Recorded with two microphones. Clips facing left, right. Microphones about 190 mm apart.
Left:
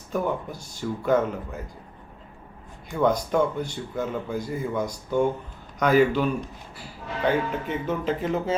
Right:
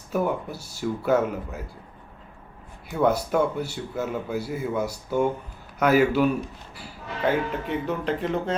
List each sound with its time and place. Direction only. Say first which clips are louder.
0.1 s speech: right 1 dB; 5° right (ahead or behind)
2.9 s speech: even; 5° right (ahead or behind)
7.3 s speech: even; centre (ahead or behind)